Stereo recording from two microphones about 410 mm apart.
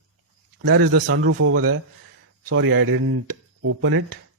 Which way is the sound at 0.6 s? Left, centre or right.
Right.